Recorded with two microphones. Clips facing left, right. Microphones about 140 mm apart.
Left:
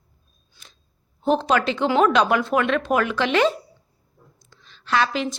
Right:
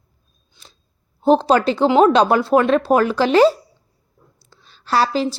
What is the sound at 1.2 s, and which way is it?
A woman's voice, 30° right (ahead or behind).